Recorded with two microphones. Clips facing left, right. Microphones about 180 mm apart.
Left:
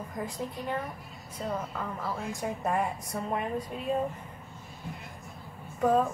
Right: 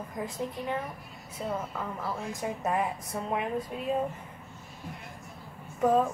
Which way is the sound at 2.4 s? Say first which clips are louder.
Even; centre (ahead or behind).